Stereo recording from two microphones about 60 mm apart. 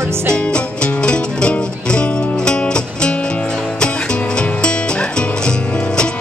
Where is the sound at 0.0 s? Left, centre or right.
Right.